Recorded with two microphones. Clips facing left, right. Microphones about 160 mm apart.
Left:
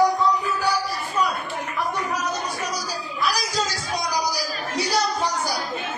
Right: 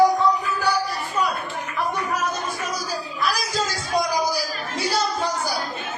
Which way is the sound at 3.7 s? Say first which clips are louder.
Right 4 dB; 55° right (ahead or behind).